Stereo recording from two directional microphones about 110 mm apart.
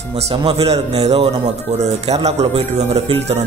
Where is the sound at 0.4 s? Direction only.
50° right (ahead or behind).